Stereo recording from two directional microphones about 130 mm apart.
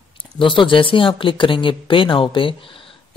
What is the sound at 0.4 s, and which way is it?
Speech, 40° left (ahead or behind).